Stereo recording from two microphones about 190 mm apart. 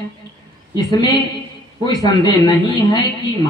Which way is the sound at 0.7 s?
20° left (ahead or behind).